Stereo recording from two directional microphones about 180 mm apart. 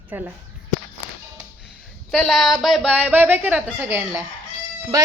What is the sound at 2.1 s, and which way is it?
A woman's voice, centre (ahead or behind).